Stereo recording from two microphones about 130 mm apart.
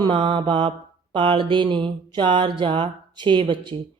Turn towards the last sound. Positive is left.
turn(degrees=-40)  # may be behind; listen again after turning